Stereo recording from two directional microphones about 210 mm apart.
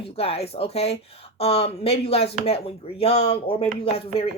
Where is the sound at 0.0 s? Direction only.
30° left (ahead or behind).